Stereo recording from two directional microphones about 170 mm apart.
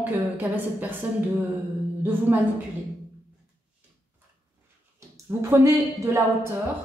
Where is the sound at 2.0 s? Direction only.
10° right (ahead or behind).